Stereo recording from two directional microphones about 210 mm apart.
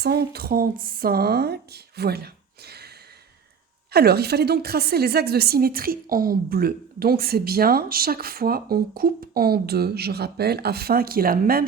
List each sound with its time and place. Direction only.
0.0 s a woman's voice: 45° right (ahead or behind)
3.9 s a woman's voice: 50° right (ahead or behind)